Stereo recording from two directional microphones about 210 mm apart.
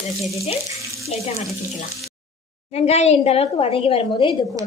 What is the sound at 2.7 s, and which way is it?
A woman's voice, 30° left (ahead or behind).